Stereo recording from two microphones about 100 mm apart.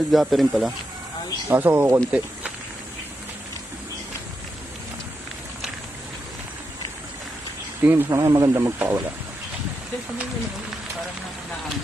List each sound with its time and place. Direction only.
0.1 s speech: centre (ahead or behind)
1.5 s speech: 20° right (ahead or behind)
7.8 s speech: 20° right (ahead or behind)
8.1 s speech: 35° right (ahead or behind)
8.7 s speech: 20° right (ahead or behind)